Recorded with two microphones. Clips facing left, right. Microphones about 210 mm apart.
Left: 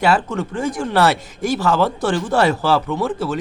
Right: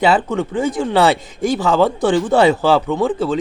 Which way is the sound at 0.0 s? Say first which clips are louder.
Right 3 dB; 20° right (ahead or behind).